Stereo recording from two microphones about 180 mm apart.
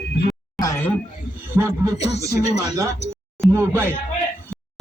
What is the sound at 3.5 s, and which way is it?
Speech, 15° right (ahead or behind).